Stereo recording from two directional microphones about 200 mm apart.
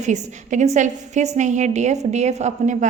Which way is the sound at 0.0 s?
35° right (ahead or behind).